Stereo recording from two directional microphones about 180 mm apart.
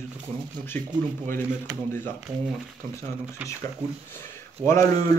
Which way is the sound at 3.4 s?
10° right (ahead or behind).